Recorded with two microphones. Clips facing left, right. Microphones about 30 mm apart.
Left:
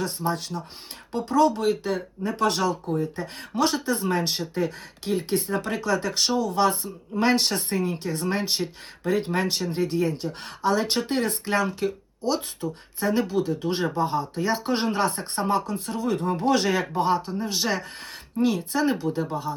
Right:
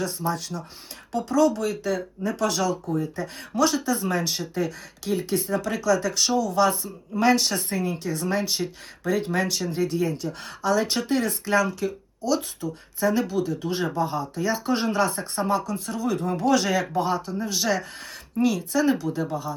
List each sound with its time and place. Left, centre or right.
0.0 s speech: left
8.6 s speech: left